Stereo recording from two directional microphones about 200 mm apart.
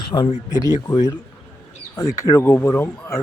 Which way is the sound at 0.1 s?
20° left (ahead or behind).